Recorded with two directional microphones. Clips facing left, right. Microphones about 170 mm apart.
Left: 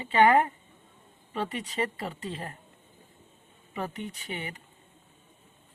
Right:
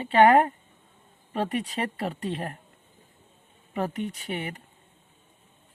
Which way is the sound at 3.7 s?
60° right (ahead or behind).